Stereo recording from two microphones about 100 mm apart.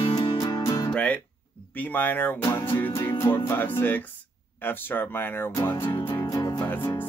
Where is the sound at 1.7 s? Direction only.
20° left (ahead or behind).